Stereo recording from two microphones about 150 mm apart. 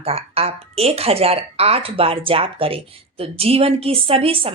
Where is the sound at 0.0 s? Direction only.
40° right (ahead or behind).